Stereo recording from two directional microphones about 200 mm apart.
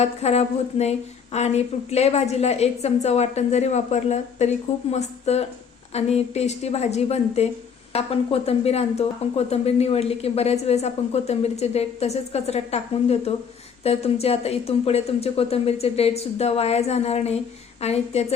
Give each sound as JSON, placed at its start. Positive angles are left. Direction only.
{"t": 0.0, "sound": "a woman's voice", "side_deg": 30}